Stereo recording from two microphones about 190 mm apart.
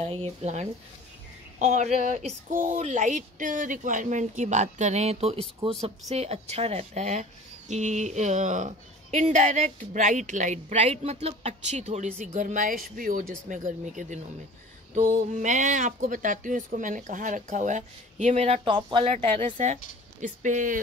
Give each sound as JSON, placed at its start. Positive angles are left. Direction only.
{"t": 0.0, "sound": "speech", "side_deg": -30}
{"t": 18.6, "sound": "speech", "side_deg": -25}